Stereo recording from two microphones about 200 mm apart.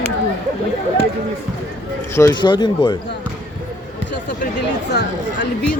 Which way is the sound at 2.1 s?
20° left (ahead or behind).